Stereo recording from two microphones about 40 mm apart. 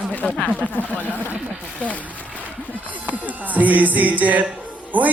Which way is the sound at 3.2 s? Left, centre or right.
Right.